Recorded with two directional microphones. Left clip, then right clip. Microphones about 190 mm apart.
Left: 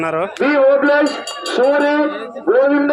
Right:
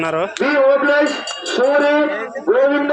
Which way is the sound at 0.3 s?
20° left (ahead or behind).